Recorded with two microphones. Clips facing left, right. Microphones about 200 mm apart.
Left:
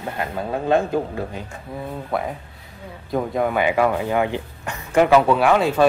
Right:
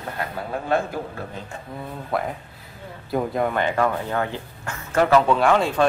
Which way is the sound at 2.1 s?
Centre (ahead or behind).